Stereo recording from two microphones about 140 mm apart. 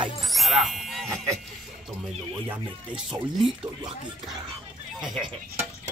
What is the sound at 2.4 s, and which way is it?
Music, 5° right (ahead or behind).